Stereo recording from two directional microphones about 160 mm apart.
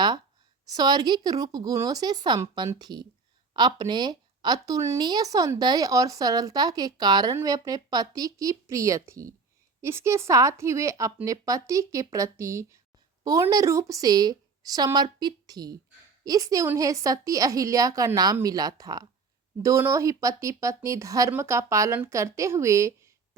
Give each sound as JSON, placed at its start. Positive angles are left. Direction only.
{"t": 0.7, "sound": "speech", "side_deg": -25}